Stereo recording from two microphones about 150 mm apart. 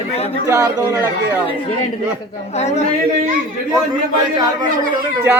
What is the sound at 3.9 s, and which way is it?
Speech, 30° right (ahead or behind).